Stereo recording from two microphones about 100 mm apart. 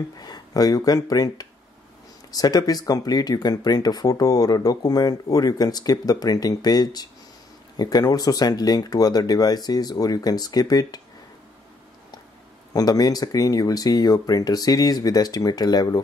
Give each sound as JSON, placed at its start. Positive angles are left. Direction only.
{"t": 0.2, "sound": "speech", "side_deg": 40}
{"t": 12.7, "sound": "speech", "side_deg": 40}